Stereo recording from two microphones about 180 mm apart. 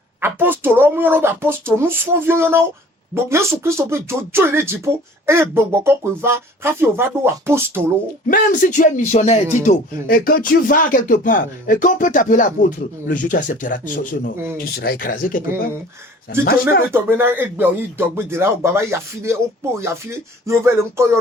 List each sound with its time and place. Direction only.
0.2 s speech: 10° right (ahead or behind)
8.3 s speech: 45° left (ahead or behind)
10.1 s speech: 55° left (ahead or behind)
16.9 s speech: 10° right (ahead or behind)